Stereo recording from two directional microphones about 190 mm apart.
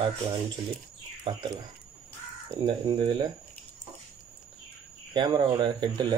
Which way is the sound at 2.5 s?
25° right (ahead or behind).